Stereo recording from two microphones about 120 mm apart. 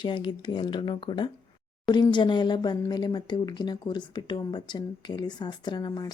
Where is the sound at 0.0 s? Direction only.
40° left (ahead or behind).